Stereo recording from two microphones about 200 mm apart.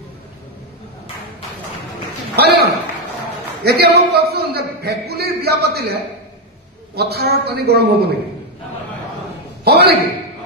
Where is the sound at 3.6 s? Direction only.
55° right (ahead or behind).